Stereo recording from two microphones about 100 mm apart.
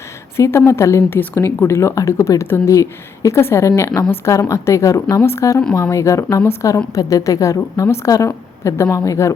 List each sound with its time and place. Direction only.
0.3 s a woman's voice: 25° left (ahead or behind)